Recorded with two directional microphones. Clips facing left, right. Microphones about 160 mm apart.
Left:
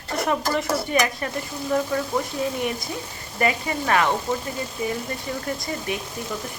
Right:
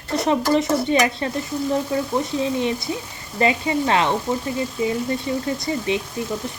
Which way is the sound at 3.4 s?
25° right (ahead or behind).